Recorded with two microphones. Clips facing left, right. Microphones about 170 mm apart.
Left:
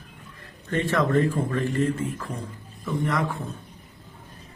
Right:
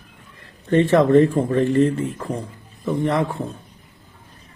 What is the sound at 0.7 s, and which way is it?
Speech, 25° right (ahead or behind).